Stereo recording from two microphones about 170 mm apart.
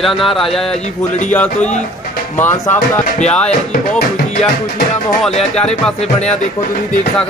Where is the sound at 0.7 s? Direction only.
40° left (ahead or behind).